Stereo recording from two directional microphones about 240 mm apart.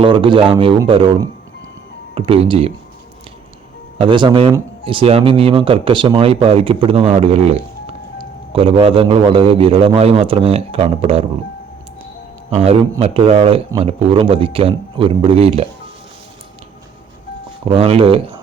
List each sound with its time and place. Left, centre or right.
0.0 s speech: right
4.0 s speech: centre
12.5 s speech: right
17.7 s speech: right